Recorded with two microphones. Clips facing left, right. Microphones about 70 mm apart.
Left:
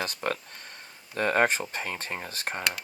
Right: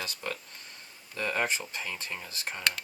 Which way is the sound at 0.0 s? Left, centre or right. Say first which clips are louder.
Left 6 dB; left.